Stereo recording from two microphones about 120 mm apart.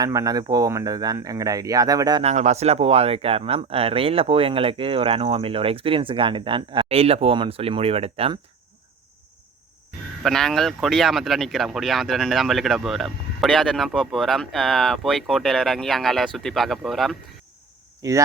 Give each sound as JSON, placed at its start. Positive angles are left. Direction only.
{"t": 0.0, "sound": "speech", "side_deg": -30}
{"t": 2.2, "sound": "speech", "side_deg": -70}
{"t": 10.2, "sound": "speech", "side_deg": 5}
{"t": 18.0, "sound": "speech", "side_deg": -30}